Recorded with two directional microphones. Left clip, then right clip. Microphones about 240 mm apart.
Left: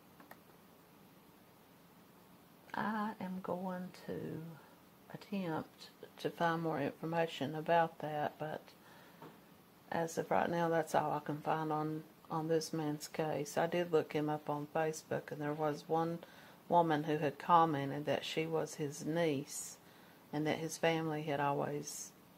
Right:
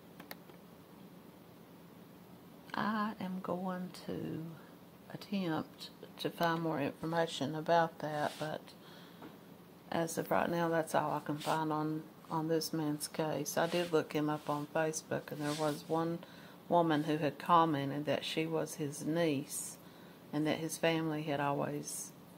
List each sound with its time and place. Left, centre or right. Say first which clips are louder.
2.7 s speech: right 2 dB; centre
5.3 s a woman's voice: right 3 dB; centre
9.8 s a woman's voice: right 1 dB; centre